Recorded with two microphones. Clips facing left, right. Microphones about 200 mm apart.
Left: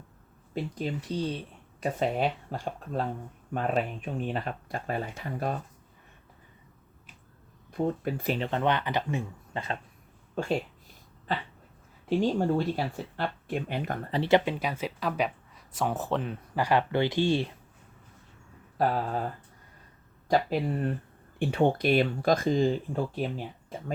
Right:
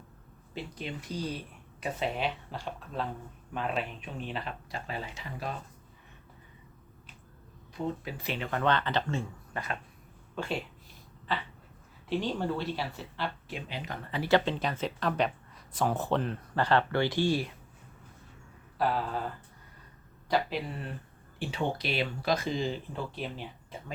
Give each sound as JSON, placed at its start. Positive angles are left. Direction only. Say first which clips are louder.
{"t": 0.5, "sound": "speech", "louder": "left 6 dB", "side_deg": 40}
{"t": 1.8, "sound": "speech", "louder": "left 5 dB", "side_deg": 45}
{"t": 7.7, "sound": "speech", "louder": "left 6 dB", "side_deg": 50}
{"t": 8.4, "sound": "speech", "louder": "right 3 dB", "side_deg": 25}
{"t": 10.3, "sound": "speech", "louder": "left 5 dB", "side_deg": 45}
{"t": 12.0, "sound": "speech", "louder": "left 5 dB", "side_deg": 45}
{"t": 14.1, "sound": "speech", "louder": "left 2 dB", "side_deg": 25}
{"t": 18.8, "sound": "speech", "louder": "left 3 dB", "side_deg": 40}
{"t": 20.2, "sound": "speech", "louder": "left 4 dB", "side_deg": 45}
{"t": 21.3, "sound": "speech", "louder": "left 8 dB", "side_deg": 55}